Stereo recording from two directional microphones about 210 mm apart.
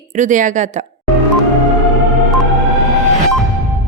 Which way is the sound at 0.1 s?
35° right (ahead or behind).